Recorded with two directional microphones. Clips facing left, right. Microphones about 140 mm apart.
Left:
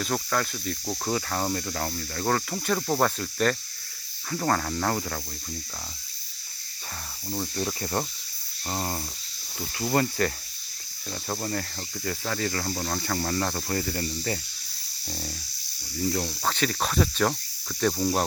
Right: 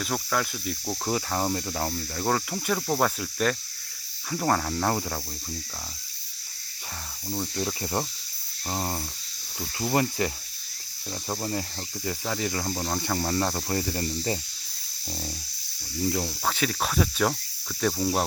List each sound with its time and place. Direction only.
0.0 s cricket: centre (ahead or behind)
7.3 s cricket: centre (ahead or behind)
7.8 s cricket: 15° right (ahead or behind)
9.7 s cricket: 15° right (ahead or behind)
16.0 s cricket: 10° right (ahead or behind)